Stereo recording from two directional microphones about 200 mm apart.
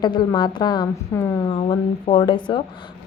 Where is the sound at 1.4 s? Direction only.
30° left (ahead or behind).